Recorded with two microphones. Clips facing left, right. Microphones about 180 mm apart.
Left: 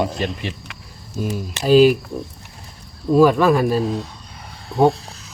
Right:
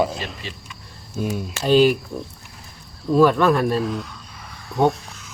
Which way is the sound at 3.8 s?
30° left (ahead or behind).